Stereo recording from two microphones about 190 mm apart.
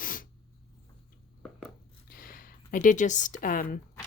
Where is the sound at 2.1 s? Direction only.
45° left (ahead or behind).